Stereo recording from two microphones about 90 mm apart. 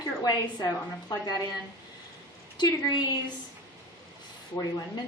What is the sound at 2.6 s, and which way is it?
Speech, 55° left (ahead or behind).